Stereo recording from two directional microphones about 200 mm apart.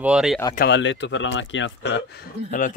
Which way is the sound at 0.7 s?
65° left (ahead or behind).